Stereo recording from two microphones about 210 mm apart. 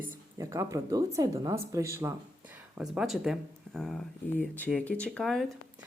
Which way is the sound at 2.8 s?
Centre (ahead or behind).